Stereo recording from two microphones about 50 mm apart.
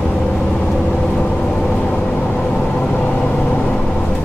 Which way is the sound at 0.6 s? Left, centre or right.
Centre.